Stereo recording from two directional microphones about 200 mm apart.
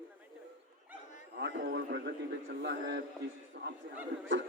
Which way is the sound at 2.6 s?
60° right (ahead or behind).